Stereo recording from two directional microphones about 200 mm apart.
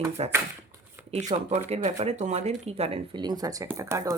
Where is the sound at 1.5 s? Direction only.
35° right (ahead or behind).